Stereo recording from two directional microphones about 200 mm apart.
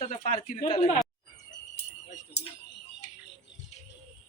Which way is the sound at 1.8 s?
55° left (ahead or behind).